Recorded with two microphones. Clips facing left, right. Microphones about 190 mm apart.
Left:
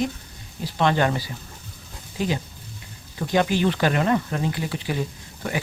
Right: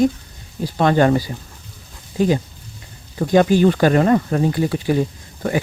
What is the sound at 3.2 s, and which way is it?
Speech, 45° right (ahead or behind).